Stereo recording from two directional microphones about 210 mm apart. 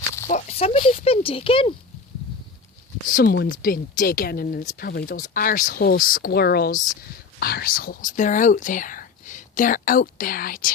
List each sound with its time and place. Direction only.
0.3 s speech: 35° left (ahead or behind)
3.2 s speech: 50° left (ahead or behind)